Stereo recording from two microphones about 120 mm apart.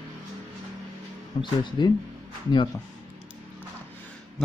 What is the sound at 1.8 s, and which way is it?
Speech, 40° left (ahead or behind).